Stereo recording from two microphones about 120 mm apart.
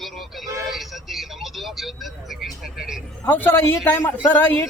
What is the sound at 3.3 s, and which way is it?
Speech, 15° left (ahead or behind).